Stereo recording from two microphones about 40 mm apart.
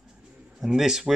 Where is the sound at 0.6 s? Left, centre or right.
Centre.